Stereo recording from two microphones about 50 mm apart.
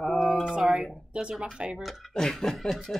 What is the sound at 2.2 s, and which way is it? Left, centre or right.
Speech, centre.